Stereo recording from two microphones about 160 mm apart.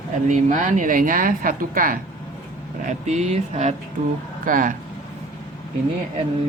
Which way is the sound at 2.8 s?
45° right (ahead or behind).